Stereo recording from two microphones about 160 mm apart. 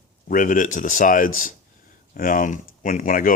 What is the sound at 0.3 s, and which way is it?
Speech, 55° left (ahead or behind).